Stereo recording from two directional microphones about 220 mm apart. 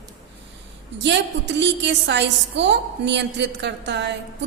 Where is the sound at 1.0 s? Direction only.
55° right (ahead or behind).